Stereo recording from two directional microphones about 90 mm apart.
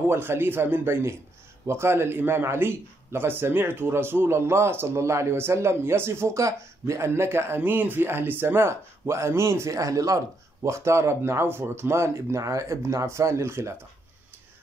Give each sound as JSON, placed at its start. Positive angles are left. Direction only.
{"t": 0.1, "sound": "a man's voice", "side_deg": -25}